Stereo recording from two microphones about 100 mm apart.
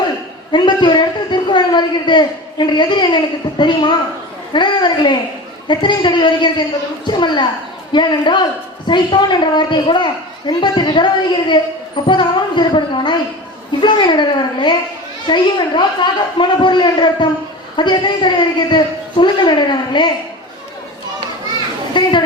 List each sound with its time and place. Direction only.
0.5 s a woman's voice: 50° left (ahead or behind)
22.0 s a woman's voice: 50° left (ahead or behind)